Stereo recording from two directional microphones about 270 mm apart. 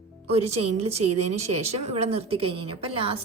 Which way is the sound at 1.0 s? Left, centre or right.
Right.